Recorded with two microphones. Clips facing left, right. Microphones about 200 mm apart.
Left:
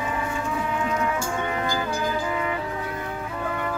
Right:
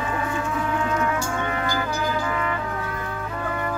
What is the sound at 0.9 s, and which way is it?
Music, 15° left (ahead or behind).